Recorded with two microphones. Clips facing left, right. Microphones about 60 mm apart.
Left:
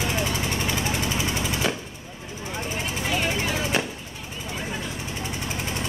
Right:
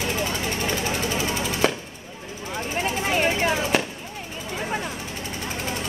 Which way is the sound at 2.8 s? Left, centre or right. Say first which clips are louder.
Right 4 dB; right.